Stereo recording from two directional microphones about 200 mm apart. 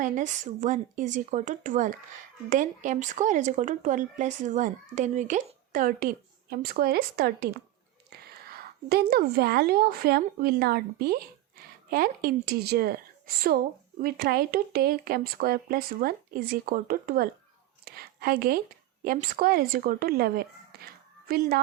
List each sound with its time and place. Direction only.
0.0 s speech: 40° right (ahead or behind)
17.8 s a sound: 50° right (ahead or behind)
19.0 s speech: 45° right (ahead or behind)